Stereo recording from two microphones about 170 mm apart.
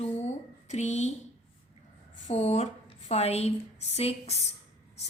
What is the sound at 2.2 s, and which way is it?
A woman's voice, 40° left (ahead or behind).